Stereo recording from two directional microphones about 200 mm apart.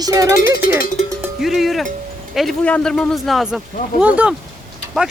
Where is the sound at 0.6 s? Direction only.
45° left (ahead or behind).